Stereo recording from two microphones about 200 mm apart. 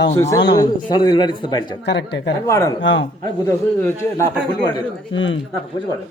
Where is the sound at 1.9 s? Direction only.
60° left (ahead or behind).